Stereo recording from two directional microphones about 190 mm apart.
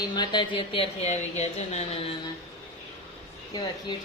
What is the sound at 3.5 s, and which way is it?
Speech, 20° left (ahead or behind).